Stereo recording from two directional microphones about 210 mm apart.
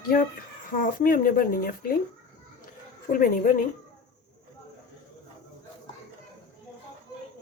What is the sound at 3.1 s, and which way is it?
Speech, 40° left (ahead or behind).